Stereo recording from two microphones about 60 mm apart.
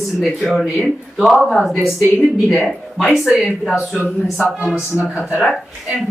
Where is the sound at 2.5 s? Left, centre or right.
Centre.